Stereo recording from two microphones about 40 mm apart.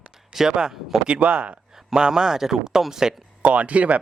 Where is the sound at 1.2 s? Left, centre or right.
Right.